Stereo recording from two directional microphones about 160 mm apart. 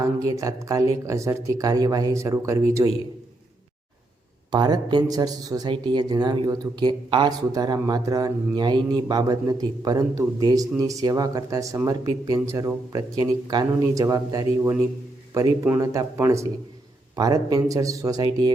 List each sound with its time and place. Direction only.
0.0 s speech: 20° right (ahead or behind)
4.5 s speech: 25° right (ahead or behind)